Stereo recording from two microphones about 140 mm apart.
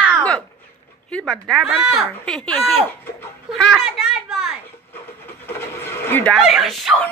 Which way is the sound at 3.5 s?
Centre (ahead or behind).